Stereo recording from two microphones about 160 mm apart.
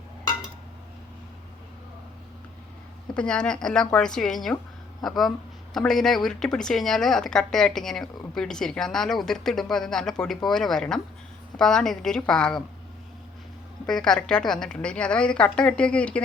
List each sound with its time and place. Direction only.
3.2 s speech: 5° left (ahead or behind)
13.8 s a woman's voice: 5° left (ahead or behind)